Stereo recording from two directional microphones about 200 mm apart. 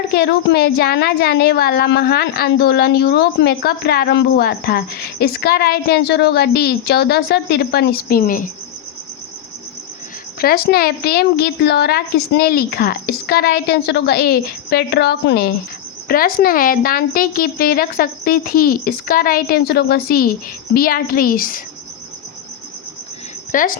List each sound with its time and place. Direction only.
0.1 s a woman's voice: 55° left (ahead or behind)
10.4 s a woman's voice: 50° left (ahead or behind)
23.5 s speech: 40° left (ahead or behind)